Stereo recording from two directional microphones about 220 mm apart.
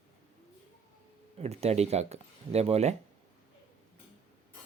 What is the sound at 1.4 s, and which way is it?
Speech, 30° right (ahead or behind).